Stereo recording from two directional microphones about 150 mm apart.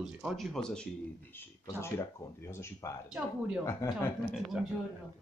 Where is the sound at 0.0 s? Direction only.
Centre (ahead or behind).